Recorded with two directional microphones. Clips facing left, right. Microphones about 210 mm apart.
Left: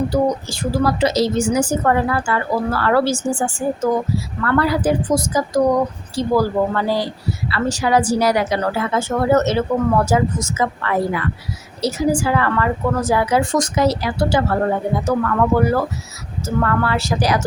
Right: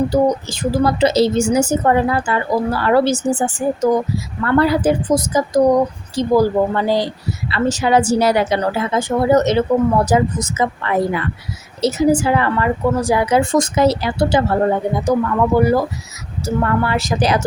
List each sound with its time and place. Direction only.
0.1 s speech: 20° right (ahead or behind)